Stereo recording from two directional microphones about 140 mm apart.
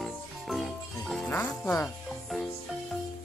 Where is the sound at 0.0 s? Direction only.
Centre (ahead or behind).